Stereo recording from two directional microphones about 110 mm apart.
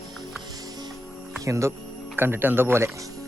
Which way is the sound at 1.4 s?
25° right (ahead or behind).